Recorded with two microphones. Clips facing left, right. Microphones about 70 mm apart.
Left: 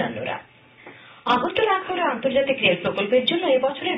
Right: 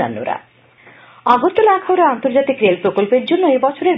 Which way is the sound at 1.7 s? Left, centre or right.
Right.